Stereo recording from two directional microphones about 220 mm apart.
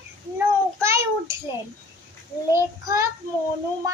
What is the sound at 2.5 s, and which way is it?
Speech, 15° right (ahead or behind).